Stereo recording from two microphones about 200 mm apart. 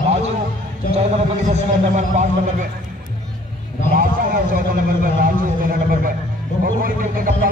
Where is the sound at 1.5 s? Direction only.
35° right (ahead or behind).